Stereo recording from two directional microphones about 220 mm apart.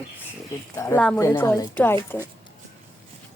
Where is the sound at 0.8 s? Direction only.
10° left (ahead or behind).